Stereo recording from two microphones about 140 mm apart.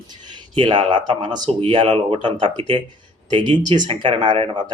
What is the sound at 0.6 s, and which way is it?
Speech, 35° right (ahead or behind).